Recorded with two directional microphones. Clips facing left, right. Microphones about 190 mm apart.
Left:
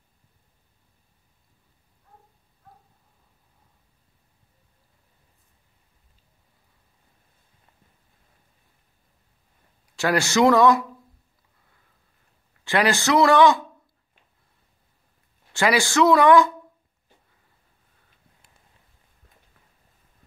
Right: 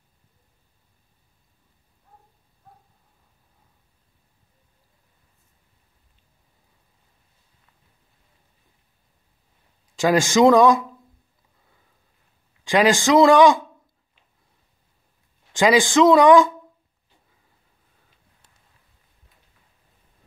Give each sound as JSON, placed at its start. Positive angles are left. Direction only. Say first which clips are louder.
{"t": 9.9, "sound": "speech", "louder": "right 4 dB", "side_deg": -15}
{"t": 12.6, "sound": "speech", "louder": "right 4 dB", "side_deg": -15}
{"t": 15.5, "sound": "speech", "louder": "right 4 dB", "side_deg": -15}